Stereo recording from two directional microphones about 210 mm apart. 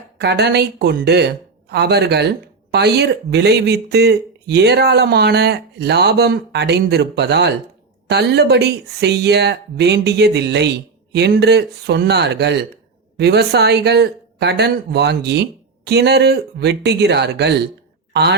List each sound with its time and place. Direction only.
0.2 s speech: 55° right (ahead or behind)